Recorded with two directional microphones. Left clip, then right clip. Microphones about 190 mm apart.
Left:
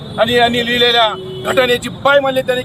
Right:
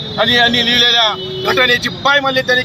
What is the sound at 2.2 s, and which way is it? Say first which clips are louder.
Speech: right 1 dB; 5° left (ahead or behind).